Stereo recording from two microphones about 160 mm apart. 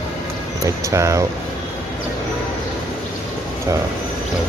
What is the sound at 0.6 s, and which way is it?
Speech, 20° right (ahead or behind).